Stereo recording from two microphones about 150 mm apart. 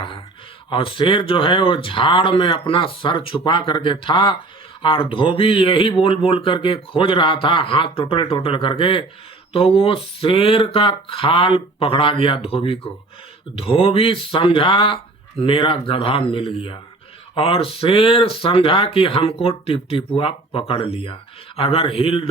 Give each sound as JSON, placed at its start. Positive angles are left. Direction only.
{"t": 0.7, "sound": "speech", "side_deg": 35}